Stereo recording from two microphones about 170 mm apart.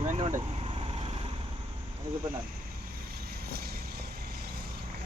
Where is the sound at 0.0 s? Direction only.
40° right (ahead or behind).